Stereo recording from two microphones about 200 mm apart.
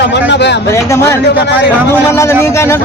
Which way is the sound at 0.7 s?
15° left (ahead or behind).